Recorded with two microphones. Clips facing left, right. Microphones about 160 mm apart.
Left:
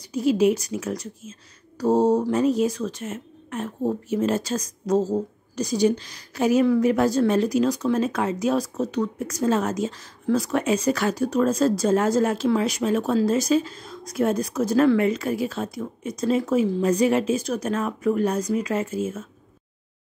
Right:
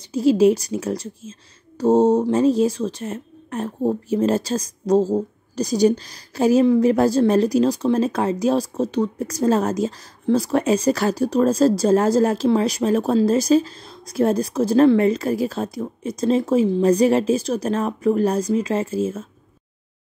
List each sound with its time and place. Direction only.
0.0 s speech: 30° right (ahead or behind)